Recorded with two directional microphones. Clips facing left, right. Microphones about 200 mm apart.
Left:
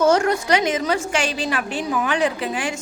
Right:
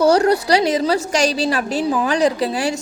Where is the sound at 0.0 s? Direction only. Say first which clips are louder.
Right 3 dB; 35° right (ahead or behind).